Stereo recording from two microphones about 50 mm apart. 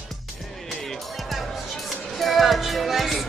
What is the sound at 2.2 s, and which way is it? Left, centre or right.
Speech, centre.